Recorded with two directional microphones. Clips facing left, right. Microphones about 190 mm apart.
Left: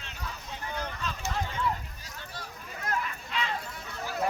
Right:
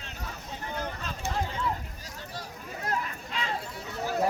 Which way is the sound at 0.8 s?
45° right (ahead or behind).